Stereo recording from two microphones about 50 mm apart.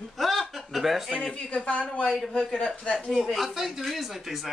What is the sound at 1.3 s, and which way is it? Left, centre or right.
Speech, left.